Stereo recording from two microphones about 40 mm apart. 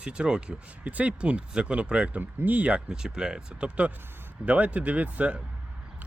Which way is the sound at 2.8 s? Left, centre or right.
Centre.